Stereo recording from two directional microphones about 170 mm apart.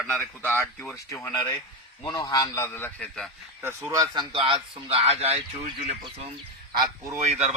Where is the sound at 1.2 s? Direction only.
25° left (ahead or behind); by 3.3 s 5° left (ahead or behind).